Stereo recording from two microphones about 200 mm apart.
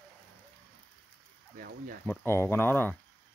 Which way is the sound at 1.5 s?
45° right (ahead or behind).